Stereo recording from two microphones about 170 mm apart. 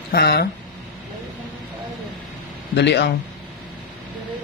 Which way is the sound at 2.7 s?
85° left.